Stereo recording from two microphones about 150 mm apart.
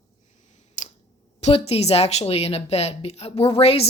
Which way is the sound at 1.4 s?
45° left (ahead or behind).